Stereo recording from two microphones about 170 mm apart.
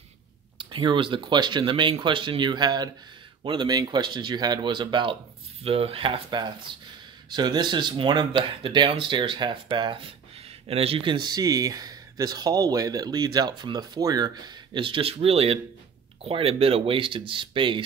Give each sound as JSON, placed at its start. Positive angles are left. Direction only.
{"t": 0.6, "sound": "speech", "side_deg": -30}